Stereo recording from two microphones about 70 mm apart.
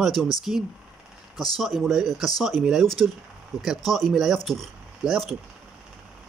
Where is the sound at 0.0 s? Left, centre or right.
Centre.